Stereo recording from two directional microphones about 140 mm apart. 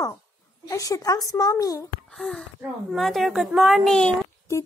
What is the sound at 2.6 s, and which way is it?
A woman's voice, centre (ahead or behind).